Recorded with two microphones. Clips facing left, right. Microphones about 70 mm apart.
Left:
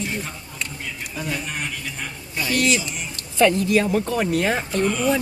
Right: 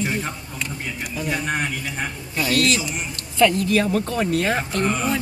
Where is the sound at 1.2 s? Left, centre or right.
Right.